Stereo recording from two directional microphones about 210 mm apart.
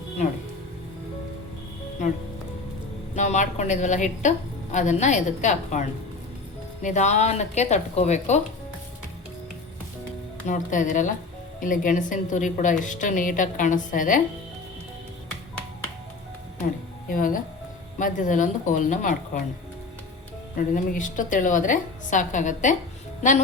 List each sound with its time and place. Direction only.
3.2 s a woman's voice: 35° left (ahead or behind)
6.8 s a woman's voice: 35° left (ahead or behind)
10.4 s a woman's voice: 35° left (ahead or behind)
17.1 s a woman's voice: 40° left (ahead or behind)
20.6 s a woman's voice: 40° left (ahead or behind)